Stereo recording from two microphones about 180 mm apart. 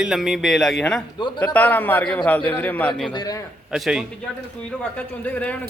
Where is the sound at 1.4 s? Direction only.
10° left (ahead or behind).